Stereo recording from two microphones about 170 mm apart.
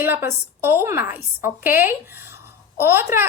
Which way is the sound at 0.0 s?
15° right (ahead or behind).